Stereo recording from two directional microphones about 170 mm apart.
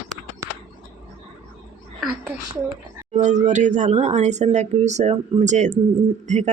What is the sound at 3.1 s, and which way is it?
Speech, 45° right (ahead or behind).